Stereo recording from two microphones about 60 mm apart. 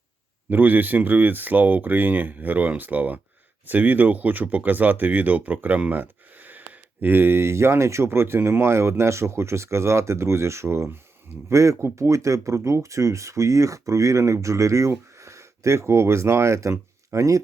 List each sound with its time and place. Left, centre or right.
0.5 s speech: right
11.4 s speech: right